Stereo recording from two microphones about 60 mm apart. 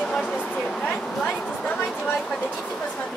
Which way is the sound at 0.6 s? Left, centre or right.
Centre.